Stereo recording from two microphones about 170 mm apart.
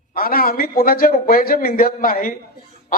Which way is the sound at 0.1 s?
60° left (ahead or behind).